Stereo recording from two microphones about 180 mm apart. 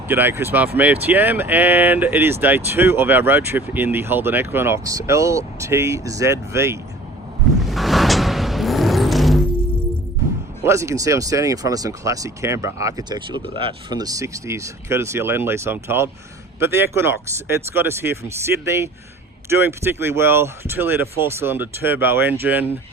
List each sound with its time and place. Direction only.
0.1 s speech: 10° right (ahead or behind)
7.6 s a sound: centre (ahead or behind)
10.6 s speech: 15° right (ahead or behind)